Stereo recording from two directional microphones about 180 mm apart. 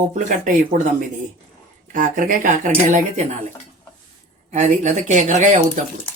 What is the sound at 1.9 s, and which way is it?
Speech, 50° right (ahead or behind).